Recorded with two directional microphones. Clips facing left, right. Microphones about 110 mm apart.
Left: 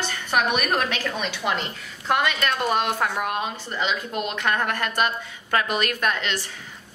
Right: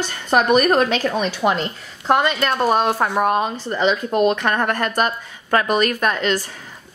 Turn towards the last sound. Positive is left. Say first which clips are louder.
# right 6 dB
turn(degrees=-40)  # may be behind; listen again after turning